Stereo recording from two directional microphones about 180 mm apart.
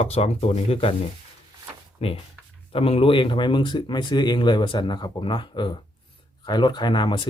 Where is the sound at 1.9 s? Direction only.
35° left (ahead or behind).